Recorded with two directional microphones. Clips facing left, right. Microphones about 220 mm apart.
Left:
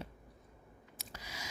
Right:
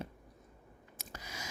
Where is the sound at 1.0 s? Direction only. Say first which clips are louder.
Right 2 dB; 50° right (ahead or behind).